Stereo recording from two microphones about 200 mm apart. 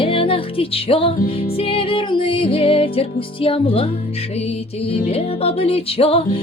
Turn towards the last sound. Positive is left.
turn(degrees=30)  # may be behind; listen again after turning